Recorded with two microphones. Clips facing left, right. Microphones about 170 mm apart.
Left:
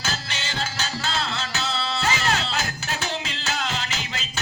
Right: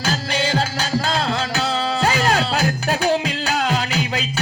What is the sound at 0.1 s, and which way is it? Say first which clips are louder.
Music: right 16 dB; 40° right (ahead or behind).